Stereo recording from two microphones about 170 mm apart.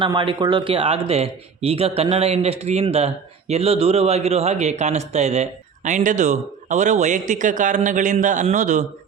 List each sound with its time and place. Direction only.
0.0 s speech: 30° right (ahead or behind); by 8.9 s 45° right (ahead or behind)